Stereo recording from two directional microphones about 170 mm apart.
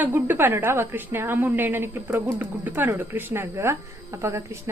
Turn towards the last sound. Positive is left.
turn(degrees=-15)  # may be behind; listen again after turning